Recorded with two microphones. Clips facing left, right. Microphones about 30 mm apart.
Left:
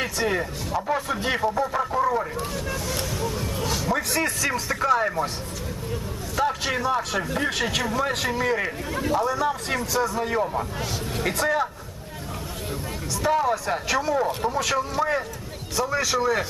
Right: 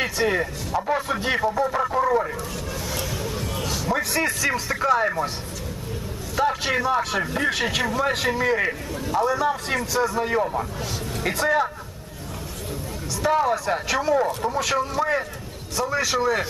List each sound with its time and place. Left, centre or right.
0.0 s speech: centre
3.2 s a sound: centre
3.7 s a man's voice: centre
6.3 s a sound: centre
6.8 s a man's voice: centre
8.9 s speech: left
9.2 s a man's voice: centre
13.2 s a man's voice: centre